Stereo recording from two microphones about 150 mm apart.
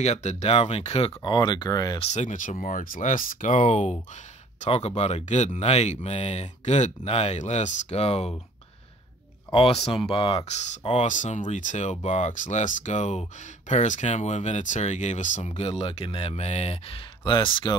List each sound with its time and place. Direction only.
0.0 s speech: 45° left (ahead or behind); by 2.0 s 25° left (ahead or behind)
2.0 s speech: 55° left (ahead or behind)
2.6 s speech: 70° left (ahead or behind); by 8.4 s 45° left (ahead or behind)
9.5 s speech: 40° left (ahead or behind)